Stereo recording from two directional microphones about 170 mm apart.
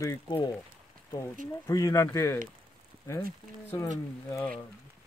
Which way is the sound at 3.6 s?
15° left (ahead or behind).